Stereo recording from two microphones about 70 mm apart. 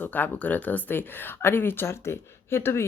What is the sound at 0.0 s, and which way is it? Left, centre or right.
A woman's voice, left.